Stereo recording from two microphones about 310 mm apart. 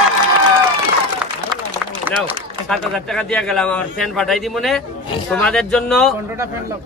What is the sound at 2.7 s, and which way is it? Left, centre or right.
A man's voice, centre.